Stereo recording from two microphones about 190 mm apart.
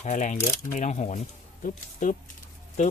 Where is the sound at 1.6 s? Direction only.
45° left (ahead or behind).